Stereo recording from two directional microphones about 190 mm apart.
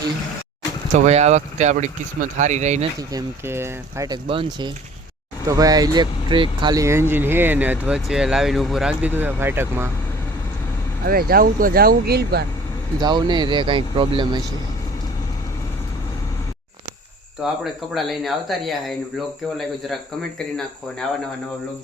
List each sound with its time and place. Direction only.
0.9 s speech: 35° right (ahead or behind)
3.1 s speech: 15° right (ahead or behind)
11.0 s speech: 55° right (ahead or behind)
13.0 s speech: 20° right (ahead or behind)
17.6 s speech: centre (ahead or behind)